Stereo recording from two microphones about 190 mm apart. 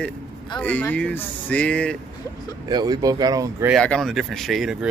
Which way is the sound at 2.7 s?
20° right (ahead or behind).